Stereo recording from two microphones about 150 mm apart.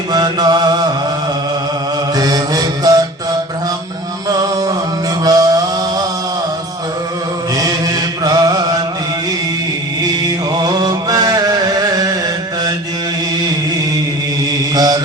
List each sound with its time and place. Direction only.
0.1 s mantra: 25° right (ahead or behind)
2.1 s mantra: 25° right (ahead or behind)
4.3 s a sound: 25° right (ahead or behind)
7.5 s chant: 25° right (ahead or behind)
10.2 s a sound: 25° right (ahead or behind)
14.8 s mantra: 25° right (ahead or behind)